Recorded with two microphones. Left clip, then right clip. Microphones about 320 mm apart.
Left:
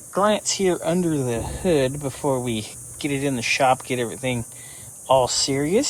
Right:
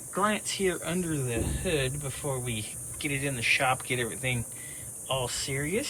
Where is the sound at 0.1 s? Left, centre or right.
Centre.